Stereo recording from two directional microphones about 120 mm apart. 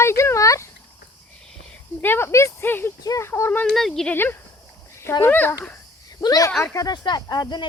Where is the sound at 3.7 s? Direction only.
Centre (ahead or behind).